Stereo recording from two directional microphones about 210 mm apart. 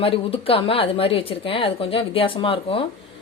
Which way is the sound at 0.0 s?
25° left (ahead or behind).